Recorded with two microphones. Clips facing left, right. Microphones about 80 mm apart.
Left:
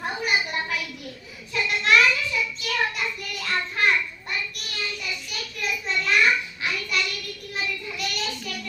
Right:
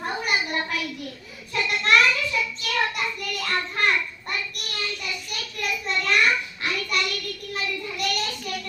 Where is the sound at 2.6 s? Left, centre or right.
Right.